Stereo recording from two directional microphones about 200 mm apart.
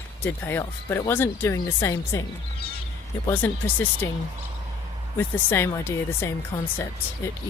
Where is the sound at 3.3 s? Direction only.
10° left (ahead or behind).